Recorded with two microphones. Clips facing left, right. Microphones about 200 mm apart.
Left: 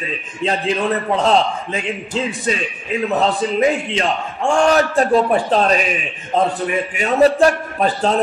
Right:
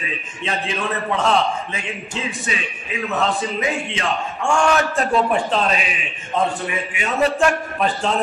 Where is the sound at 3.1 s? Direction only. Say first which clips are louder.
Left 3 dB; 35° left (ahead or behind).